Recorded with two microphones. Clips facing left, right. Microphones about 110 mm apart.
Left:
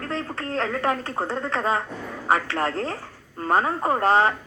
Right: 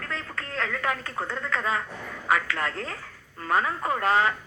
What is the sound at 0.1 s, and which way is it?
A woman's voice, 35° left (ahead or behind).